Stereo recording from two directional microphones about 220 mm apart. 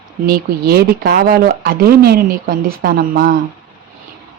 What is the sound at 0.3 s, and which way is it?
Speech, 45° right (ahead or behind).